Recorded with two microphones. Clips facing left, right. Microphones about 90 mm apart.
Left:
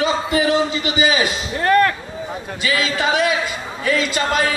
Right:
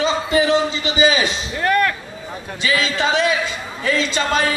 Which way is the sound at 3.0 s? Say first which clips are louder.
Even; 25° right (ahead or behind).